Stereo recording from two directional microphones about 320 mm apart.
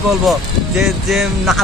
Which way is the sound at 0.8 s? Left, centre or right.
Centre.